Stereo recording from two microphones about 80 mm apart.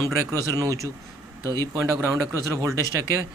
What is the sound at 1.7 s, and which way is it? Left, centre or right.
Speech, right.